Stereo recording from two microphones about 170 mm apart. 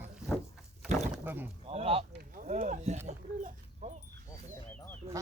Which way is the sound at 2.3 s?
50° right (ahead or behind).